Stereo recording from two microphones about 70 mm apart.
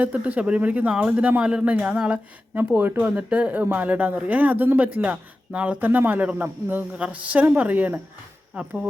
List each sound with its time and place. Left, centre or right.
0.0 s speech: right
2.7 s speech: right